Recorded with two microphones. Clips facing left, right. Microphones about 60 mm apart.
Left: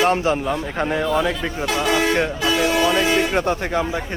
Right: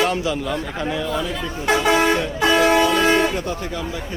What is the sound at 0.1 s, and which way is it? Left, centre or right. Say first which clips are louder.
Speech: left 3 dB; left.